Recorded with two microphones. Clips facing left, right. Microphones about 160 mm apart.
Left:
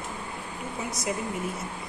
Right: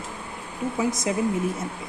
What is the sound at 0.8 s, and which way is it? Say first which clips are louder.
Speech: right 11 dB; 90° right.